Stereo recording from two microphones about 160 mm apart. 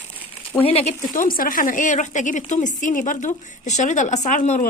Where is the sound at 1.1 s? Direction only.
60° left (ahead or behind).